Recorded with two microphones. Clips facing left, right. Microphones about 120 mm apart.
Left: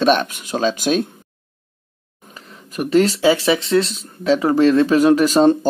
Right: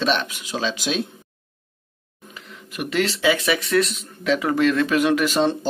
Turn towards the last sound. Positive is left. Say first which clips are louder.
# left 7 dB
turn(degrees=40)  # may be behind; listen again after turning